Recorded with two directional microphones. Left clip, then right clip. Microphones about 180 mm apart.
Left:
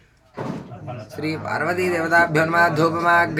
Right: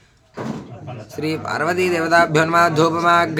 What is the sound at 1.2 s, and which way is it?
Speech, 20° right (ahead or behind).